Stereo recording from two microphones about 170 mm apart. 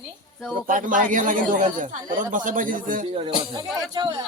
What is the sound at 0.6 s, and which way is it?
Speech, 50° right (ahead or behind).